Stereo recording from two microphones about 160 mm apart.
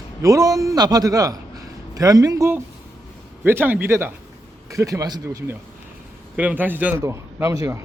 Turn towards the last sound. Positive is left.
turn(degrees=-20)  # may be behind; listen again after turning